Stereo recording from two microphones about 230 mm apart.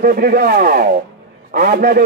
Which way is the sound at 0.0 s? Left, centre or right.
Right.